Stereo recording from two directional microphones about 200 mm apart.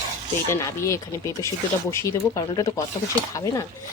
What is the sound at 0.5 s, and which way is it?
Speech, 15° left (ahead or behind).